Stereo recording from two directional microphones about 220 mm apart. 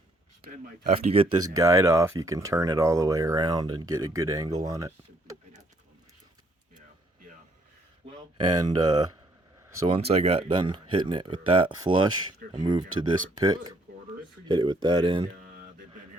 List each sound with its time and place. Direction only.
0.9 s speech: 25° right (ahead or behind)
8.4 s speech: 20° right (ahead or behind)